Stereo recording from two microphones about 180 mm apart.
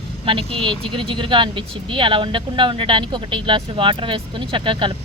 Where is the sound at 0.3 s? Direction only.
30° right (ahead or behind).